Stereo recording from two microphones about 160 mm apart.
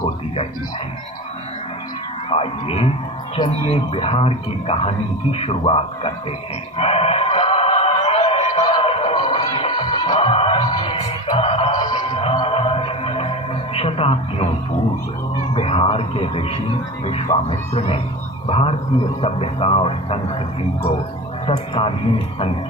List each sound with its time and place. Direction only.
2.3 s speech: 35° left (ahead or behind)
6.7 s a sound: 40° left (ahead or behind)
11.8 s music: 30° left (ahead or behind)
13.7 s speech: 35° left (ahead or behind)
15.5 s speech: 35° left (ahead or behind)
21.4 s speech: 35° left (ahead or behind)